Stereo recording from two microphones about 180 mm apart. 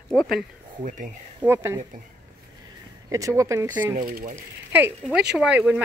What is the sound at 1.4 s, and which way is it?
Speech, 15° right (ahead or behind).